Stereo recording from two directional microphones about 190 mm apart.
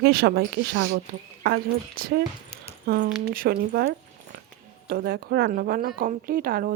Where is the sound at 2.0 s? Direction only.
50° right (ahead or behind).